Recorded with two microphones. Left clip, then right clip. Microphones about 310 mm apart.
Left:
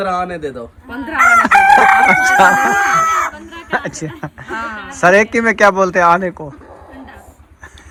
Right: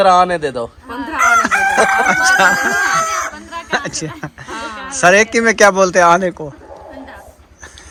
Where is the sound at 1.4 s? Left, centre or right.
Centre.